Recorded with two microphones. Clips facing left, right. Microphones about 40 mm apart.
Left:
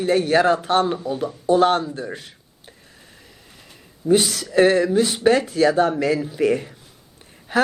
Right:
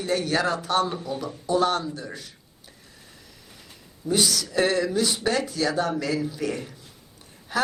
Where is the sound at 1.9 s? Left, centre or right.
Left.